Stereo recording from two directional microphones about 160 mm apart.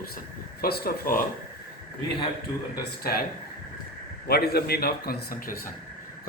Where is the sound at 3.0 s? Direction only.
70° left (ahead or behind).